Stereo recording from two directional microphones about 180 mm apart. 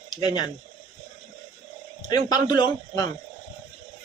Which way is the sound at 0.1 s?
25° left (ahead or behind).